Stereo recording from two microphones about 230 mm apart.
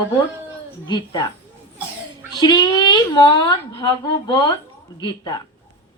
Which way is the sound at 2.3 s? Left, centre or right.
Centre.